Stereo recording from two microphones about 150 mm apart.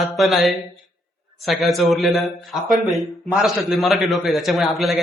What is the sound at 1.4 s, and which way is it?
A man's voice, centre (ahead or behind).